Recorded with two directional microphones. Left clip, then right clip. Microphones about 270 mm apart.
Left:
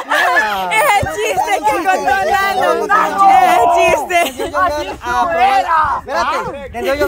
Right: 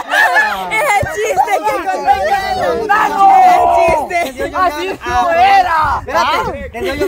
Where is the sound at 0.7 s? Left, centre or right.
Centre.